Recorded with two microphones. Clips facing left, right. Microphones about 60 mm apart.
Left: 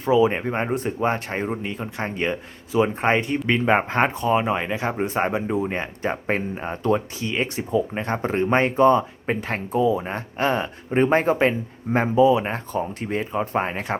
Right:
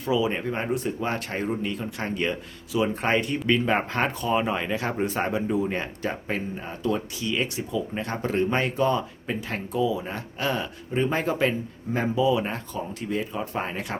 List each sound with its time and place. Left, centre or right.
0.0 s speech: left
6.2 s speech: left